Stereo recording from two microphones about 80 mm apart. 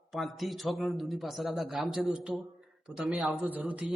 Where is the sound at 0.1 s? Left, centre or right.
Centre.